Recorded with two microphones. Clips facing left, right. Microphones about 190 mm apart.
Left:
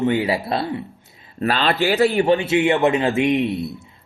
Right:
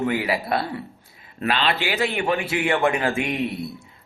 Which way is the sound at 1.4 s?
40° left (ahead or behind).